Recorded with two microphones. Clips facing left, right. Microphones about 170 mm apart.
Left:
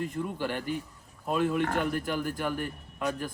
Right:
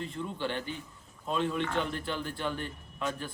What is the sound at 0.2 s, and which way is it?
A man's voice, 10° left (ahead or behind).